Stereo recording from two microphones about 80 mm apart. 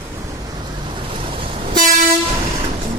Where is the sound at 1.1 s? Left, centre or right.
Right.